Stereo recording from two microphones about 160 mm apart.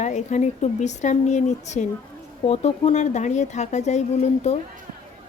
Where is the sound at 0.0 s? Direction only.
50° left (ahead or behind).